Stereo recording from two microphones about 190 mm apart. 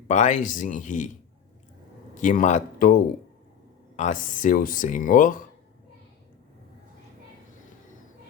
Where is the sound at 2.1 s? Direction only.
40° left (ahead or behind).